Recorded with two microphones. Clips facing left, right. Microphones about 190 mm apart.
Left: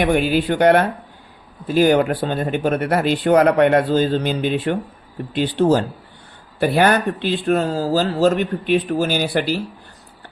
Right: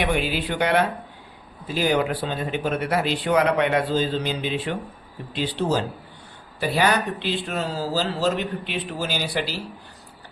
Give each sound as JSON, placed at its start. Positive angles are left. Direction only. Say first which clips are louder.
{"t": 0.0, "sound": "speech", "louder": "left 7 dB", "side_deg": 50}